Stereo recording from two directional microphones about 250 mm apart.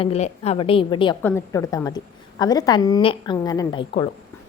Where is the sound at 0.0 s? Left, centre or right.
Left.